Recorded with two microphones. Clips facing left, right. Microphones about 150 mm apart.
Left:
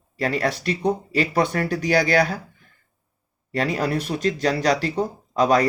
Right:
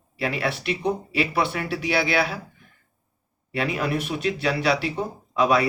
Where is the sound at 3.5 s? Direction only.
40° left (ahead or behind).